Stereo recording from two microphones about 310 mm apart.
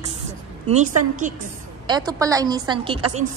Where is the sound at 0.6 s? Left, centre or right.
Right.